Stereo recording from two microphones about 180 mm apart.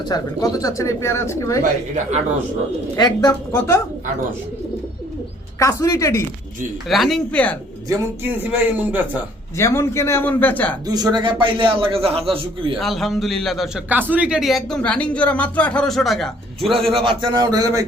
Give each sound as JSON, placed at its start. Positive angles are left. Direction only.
{"t": 0.1, "sound": "speech", "side_deg": 20}
{"t": 2.9, "sound": "speech", "side_deg": 20}
{"t": 5.5, "sound": "speech", "side_deg": 20}
{"t": 6.8, "sound": "a man's voice", "side_deg": 0}
{"t": 7.9, "sound": "a man's voice", "side_deg": -10}
{"t": 9.6, "sound": "speech", "side_deg": 15}
{"t": 10.8, "sound": "a man's voice", "side_deg": -20}
{"t": 12.8, "sound": "a man's voice", "side_deg": 0}
{"t": 16.9, "sound": "a man's voice", "side_deg": -30}